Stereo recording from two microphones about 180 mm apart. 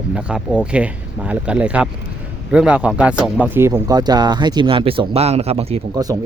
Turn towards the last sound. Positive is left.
turn(degrees=-20)  # may be behind; listen again after turning